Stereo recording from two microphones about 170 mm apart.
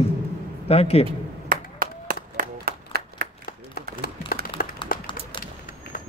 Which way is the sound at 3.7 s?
65° left (ahead or behind).